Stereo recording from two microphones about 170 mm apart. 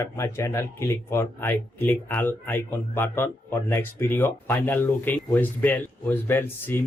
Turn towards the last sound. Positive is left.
turn(degrees=15)  # may be behind; listen again after turning